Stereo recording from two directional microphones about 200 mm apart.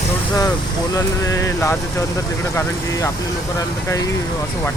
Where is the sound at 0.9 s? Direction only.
15° left (ahead or behind).